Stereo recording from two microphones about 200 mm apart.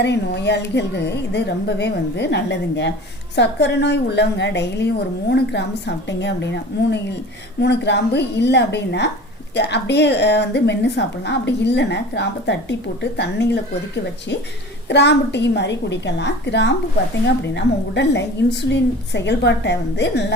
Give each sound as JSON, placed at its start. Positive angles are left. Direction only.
{"t": 0.0, "sound": "a woman's voice", "side_deg": 60}